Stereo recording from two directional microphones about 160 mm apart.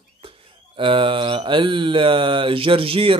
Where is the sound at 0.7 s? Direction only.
35° right (ahead or behind).